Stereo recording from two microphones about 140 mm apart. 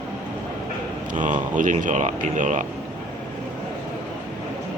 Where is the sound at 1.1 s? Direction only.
65° right (ahead or behind).